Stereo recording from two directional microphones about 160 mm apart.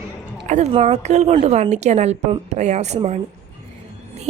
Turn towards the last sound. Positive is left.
turn(degrees=-45)  # may be behind; listen again after turning